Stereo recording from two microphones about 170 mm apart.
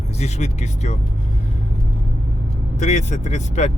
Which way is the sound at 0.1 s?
40° left (ahead or behind).